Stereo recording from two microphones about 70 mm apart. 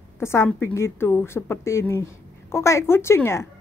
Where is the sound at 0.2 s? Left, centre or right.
Left.